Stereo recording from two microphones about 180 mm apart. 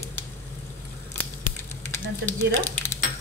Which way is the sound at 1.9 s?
15° left (ahead or behind).